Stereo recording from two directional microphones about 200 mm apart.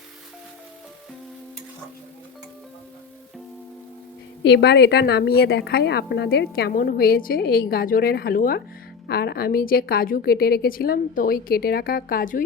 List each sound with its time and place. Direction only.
4.4 s a woman's voice: 55° left (ahead or behind)